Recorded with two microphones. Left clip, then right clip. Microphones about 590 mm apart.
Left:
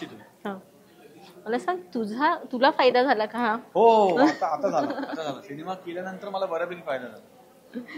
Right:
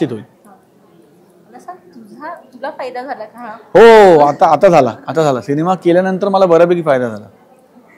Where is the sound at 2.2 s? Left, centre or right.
Left.